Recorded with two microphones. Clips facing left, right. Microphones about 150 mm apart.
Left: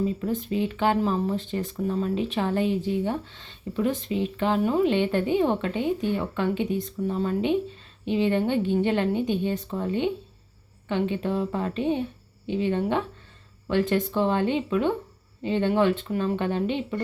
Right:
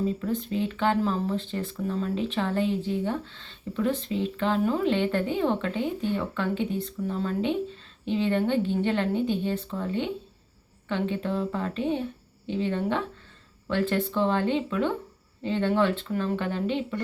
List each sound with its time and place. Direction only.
0.0 s speech: 15° left (ahead or behind)